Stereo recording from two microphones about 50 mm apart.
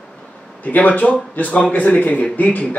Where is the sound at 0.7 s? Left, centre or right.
Left.